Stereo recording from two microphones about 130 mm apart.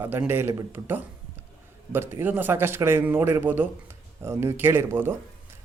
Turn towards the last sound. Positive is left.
turn(degrees=-20)  # may be behind; listen again after turning